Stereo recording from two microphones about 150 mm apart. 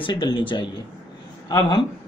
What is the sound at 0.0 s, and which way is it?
Speech, 30° left (ahead or behind).